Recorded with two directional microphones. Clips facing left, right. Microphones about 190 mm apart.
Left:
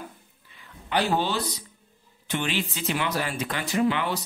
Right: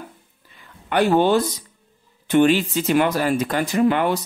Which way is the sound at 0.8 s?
55° right (ahead or behind).